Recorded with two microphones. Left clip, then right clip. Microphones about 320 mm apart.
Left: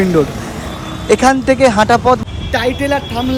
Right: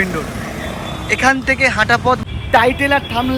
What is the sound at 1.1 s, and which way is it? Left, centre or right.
Speech, centre.